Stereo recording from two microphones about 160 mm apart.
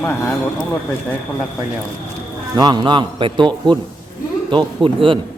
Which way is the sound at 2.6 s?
30° right (ahead or behind).